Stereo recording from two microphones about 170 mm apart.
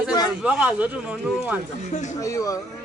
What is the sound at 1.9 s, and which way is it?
Speech, 45° left (ahead or behind).